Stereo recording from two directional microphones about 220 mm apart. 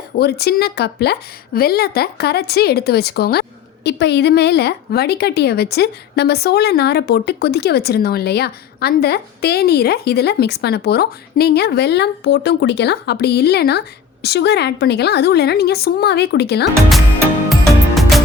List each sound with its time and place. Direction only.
0.2 s a woman's voice: 45° left (ahead or behind)
17.7 s music: centre (ahead or behind)